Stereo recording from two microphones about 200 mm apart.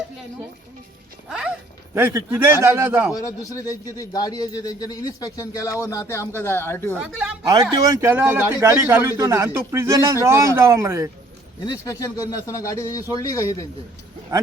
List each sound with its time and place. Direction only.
1.3 s a man's voice: 5° right (ahead or behind)
3.1 s speech: 15° left (ahead or behind)
6.9 s a man's voice: 5° right (ahead or behind)
7.5 s a man's voice: 20° right (ahead or behind)
11.6 s speech: 20° left (ahead or behind)